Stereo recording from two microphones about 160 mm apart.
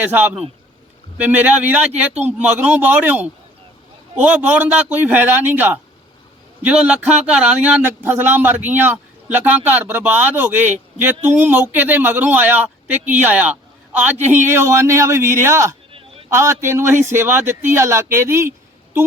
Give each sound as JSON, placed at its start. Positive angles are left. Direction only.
{"t": 0.0, "sound": "speech", "side_deg": -10}